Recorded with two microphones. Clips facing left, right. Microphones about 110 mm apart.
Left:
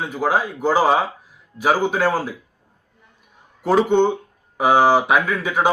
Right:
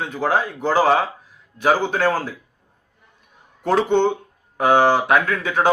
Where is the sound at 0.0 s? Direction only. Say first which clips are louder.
Even; 10° left (ahead or behind).